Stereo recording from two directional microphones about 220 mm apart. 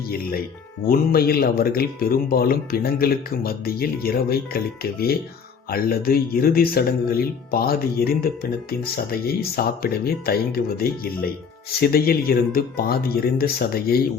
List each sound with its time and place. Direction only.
0.9 s speech: 45° left (ahead or behind)